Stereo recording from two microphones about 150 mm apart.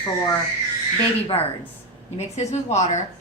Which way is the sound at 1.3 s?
35° left (ahead or behind).